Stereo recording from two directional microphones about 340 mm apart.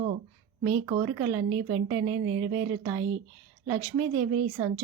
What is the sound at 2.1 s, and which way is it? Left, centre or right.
Speech, right.